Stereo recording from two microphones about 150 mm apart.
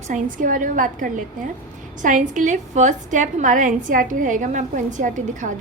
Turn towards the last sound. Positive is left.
turn(degrees=-55)  # may be behind; listen again after turning